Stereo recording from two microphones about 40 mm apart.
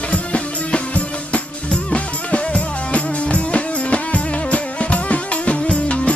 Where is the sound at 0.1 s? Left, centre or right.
Left.